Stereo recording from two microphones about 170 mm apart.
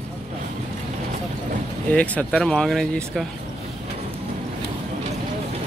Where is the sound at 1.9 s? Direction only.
5° left (ahead or behind).